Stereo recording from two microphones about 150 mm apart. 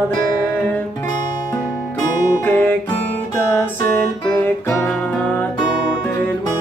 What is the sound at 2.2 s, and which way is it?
Music, 20° left (ahead or behind).